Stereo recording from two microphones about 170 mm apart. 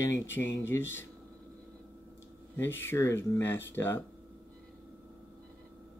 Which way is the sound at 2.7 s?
15° left (ahead or behind).